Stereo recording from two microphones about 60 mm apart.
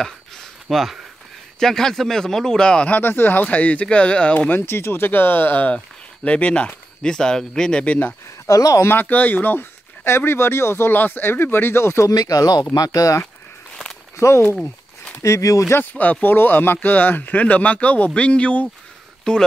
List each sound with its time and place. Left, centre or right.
0.7 s a man's voice: centre
2.9 s speech: left; by 4.5 s centre
4.5 s speech: left
6.2 s a man's voice: centre
8.5 s speech: left
9.0 s speech: left
12.1 s speech: left
14.1 s speech: left
14.6 s a sound: centre
15.2 s speech: left
15.7 s a man's voice: left; by 19.4 s centre